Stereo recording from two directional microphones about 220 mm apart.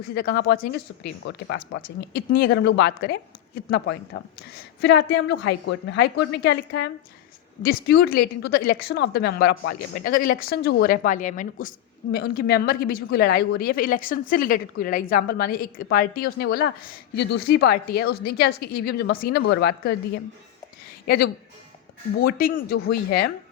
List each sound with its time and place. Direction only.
0.1 s a woman's voice: 40° left (ahead or behind)
3.7 s a woman's voice: 60° left (ahead or behind)
22.2 s a woman's voice: 40° left (ahead or behind)